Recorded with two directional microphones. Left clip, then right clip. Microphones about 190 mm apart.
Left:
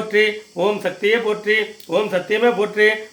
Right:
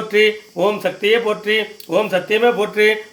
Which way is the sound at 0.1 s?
Centre (ahead or behind).